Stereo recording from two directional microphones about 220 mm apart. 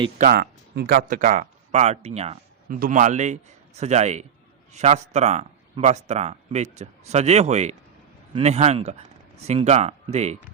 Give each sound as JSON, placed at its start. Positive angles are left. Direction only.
{"t": 0.2, "sound": "speech", "side_deg": -45}